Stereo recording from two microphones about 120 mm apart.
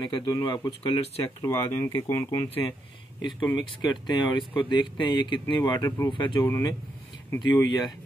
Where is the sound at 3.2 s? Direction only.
40° left (ahead or behind).